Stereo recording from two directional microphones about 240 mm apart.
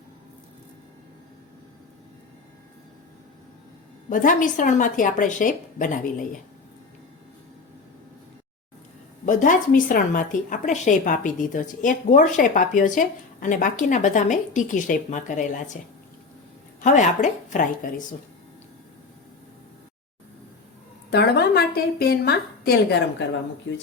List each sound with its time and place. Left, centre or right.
4.1 s a woman's voice: left
9.2 s a woman's voice: left
16.8 s a woman's voice: left
21.1 s a woman's voice: left
23.7 s speech: left